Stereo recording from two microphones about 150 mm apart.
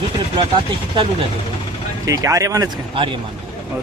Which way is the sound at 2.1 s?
20° right (ahead or behind).